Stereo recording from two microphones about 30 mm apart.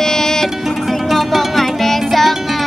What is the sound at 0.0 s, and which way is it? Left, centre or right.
Music, centre.